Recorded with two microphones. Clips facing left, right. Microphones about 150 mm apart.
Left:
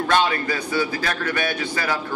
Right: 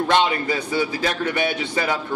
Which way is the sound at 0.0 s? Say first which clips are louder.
Right 1 dB; 25° right (ahead or behind).